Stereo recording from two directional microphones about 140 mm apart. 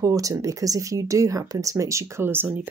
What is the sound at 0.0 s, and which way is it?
Speech, 25° right (ahead or behind).